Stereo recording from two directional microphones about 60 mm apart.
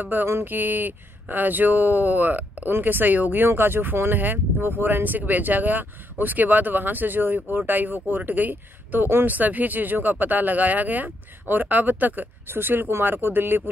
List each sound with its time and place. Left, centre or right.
0.0 s speech: right